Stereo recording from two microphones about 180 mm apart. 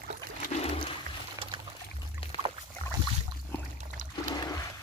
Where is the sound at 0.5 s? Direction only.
35° left (ahead or behind).